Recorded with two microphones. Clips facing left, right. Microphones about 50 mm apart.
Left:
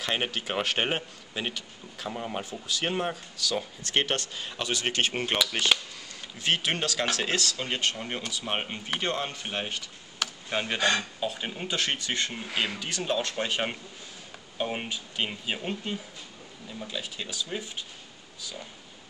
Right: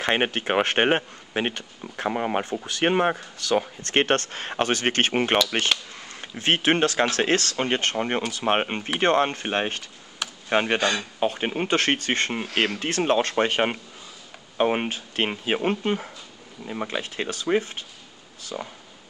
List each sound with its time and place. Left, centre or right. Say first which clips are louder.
0.0 s speech: right 7 dB; right
12.5 s speech: right 5 dB; right
12.8 s speech: right 8 dB; right